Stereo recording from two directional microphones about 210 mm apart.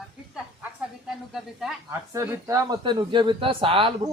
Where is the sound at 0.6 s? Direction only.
Centre (ahead or behind).